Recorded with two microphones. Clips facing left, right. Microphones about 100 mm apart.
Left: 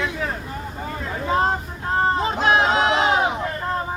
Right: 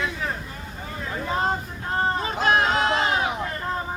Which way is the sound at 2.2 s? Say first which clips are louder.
Left 3 dB; 25° left (ahead or behind).